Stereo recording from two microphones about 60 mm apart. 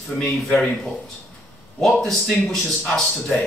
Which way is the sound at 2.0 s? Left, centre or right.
Centre.